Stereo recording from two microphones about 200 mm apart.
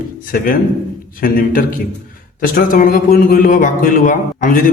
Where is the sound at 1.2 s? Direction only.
45° left (ahead or behind).